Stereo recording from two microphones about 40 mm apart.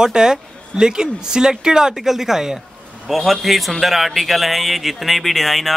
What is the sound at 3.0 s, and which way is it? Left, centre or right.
A man's voice, centre.